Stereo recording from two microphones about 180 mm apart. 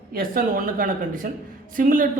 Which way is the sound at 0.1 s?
55° right (ahead or behind).